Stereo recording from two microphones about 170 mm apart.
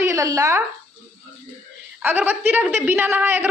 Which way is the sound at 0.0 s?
20° right (ahead or behind).